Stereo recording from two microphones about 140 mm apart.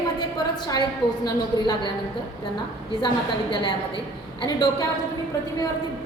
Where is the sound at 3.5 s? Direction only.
35° left (ahead or behind).